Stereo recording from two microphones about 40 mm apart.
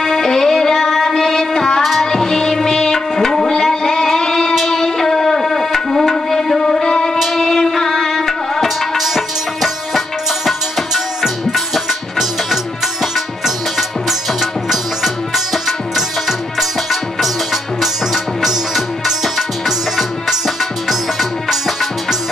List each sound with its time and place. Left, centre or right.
0.0 s music: centre
1.8 s music: centre
2.0 s music: centre
6.8 s music: centre
8.6 s music: centre
13.7 s music: centre
16.3 s music: centre